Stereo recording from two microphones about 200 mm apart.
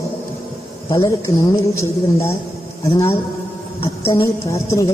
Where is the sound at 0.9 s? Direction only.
20° left (ahead or behind).